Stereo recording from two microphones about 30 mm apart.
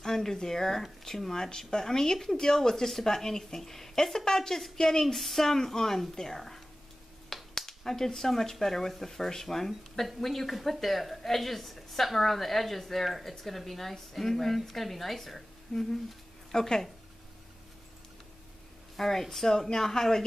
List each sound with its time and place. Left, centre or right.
0.0 s a sound: centre
0.4 s a woman's voice: centre
5.0 s a woman's voice: centre
9.7 s a woman's voice: centre
18.9 s a woman's voice: centre